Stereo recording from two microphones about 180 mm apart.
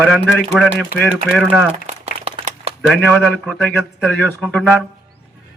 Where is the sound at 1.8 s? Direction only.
35° right (ahead or behind).